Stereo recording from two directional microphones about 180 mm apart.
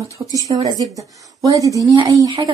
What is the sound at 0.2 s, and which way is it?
Speech, 15° right (ahead or behind).